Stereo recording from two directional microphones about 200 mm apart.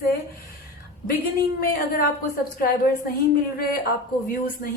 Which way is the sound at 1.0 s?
50° left (ahead or behind).